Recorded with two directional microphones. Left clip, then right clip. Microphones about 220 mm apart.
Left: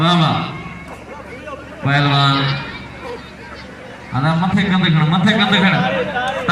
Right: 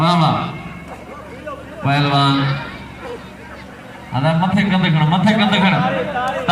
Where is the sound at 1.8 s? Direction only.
45° right (ahead or behind).